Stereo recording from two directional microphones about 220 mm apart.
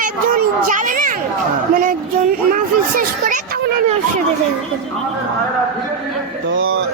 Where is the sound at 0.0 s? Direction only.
35° right (ahead or behind).